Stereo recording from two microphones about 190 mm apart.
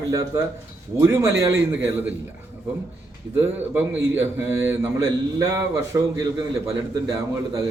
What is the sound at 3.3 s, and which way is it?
A man's voice, 10° right (ahead or behind).